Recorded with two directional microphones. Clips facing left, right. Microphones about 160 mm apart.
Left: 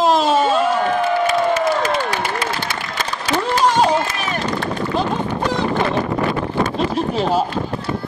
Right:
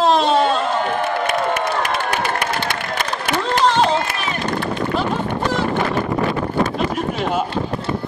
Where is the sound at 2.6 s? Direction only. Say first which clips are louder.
Right 2 dB; 55° right (ahead or behind).